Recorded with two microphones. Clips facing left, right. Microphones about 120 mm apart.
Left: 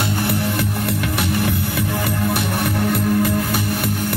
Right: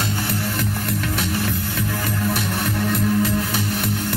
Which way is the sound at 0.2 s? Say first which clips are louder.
Left 4 dB; 10° left (ahead or behind).